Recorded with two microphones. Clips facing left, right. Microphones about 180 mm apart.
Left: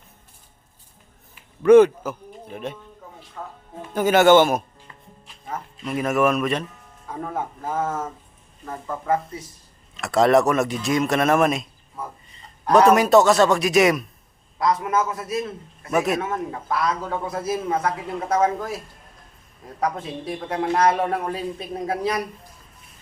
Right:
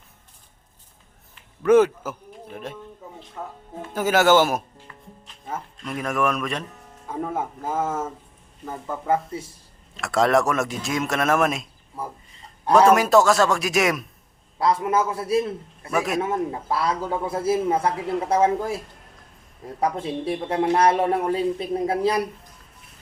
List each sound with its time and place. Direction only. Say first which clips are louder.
1.6 s speech: left 4 dB; 5° right (ahead or behind)
3.4 s speech: right 1 dB; 10° right (ahead or behind)
5.7 s speech: left 5 dB; 5° left (ahead or behind)
9.0 s a man's voice: even; 25° right (ahead or behind)
10.0 s speech: left 3 dB; centre (ahead or behind)
12.7 s speech: left 1 dB; centre (ahead or behind)
14.6 s a man's voice: right 1 dB; 30° right (ahead or behind)
19.8 s a man's voice: right 2 dB; 30° right (ahead or behind)